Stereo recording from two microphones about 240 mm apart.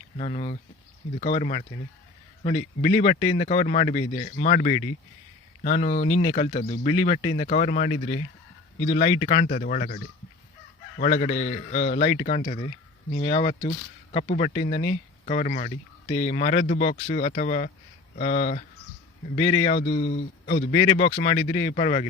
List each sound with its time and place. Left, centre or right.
0.2 s speech: left
11.0 s speech: left